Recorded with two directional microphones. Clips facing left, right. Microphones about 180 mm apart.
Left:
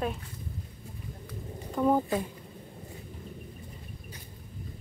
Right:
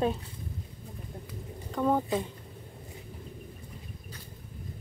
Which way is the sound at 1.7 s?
10° left (ahead or behind).